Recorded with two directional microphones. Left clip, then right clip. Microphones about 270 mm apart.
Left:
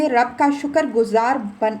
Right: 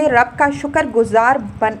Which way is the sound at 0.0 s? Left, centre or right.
Centre.